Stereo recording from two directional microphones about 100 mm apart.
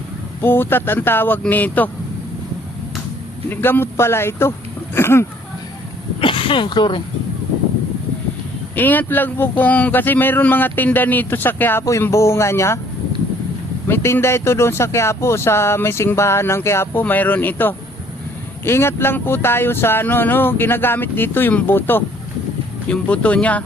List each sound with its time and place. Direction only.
0.4 s speech: 20° left (ahead or behind)
3.5 s speech: 20° left (ahead or behind)
6.1 s speech: 60° left (ahead or behind)
8.7 s speech: 20° left (ahead or behind)
13.8 s speech: 25° left (ahead or behind)